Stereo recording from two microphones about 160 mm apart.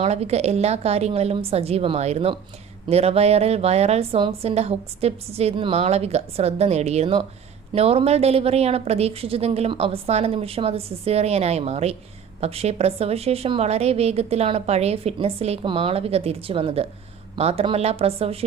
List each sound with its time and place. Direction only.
0.0 s a woman's voice: 40° right (ahead or behind)